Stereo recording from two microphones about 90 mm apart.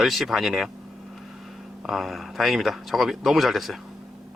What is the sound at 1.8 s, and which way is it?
Speech, centre (ahead or behind).